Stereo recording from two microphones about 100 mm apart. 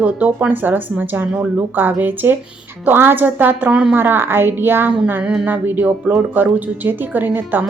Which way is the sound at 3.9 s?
20° right (ahead or behind).